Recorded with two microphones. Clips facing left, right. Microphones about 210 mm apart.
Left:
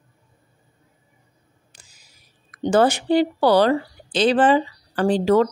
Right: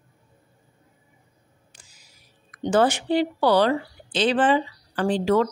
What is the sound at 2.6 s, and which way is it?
Speech, 40° left (ahead or behind).